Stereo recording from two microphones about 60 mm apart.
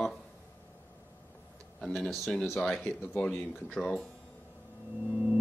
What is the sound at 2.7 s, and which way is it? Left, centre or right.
Speech, left.